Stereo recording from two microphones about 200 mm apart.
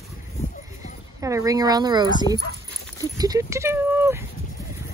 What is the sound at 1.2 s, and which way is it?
Speech, 15° right (ahead or behind).